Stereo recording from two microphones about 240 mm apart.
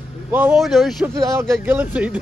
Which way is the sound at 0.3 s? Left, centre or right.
Centre.